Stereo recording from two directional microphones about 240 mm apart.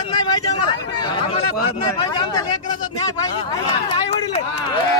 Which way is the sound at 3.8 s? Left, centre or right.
Left.